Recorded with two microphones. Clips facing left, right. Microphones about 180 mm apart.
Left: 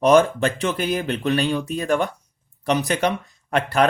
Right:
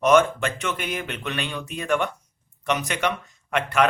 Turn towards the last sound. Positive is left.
turn(degrees=35)  # may be behind; listen again after turning